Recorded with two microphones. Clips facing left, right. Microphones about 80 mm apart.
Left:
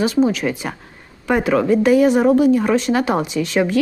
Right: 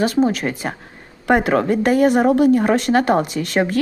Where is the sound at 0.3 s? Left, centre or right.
Right.